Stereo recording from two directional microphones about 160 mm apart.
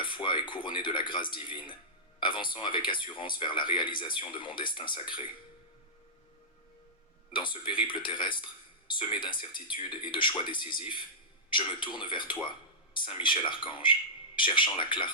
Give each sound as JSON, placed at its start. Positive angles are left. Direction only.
{"t": 0.0, "sound": "speech", "side_deg": 30}
{"t": 7.3, "sound": "speech", "side_deg": 30}